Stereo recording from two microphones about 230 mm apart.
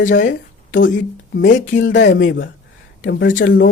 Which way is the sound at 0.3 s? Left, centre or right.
Left.